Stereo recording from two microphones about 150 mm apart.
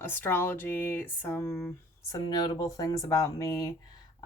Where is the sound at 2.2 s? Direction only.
25° left (ahead or behind).